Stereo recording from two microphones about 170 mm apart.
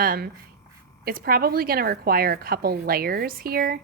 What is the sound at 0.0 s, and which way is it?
Speech, 60° right (ahead or behind).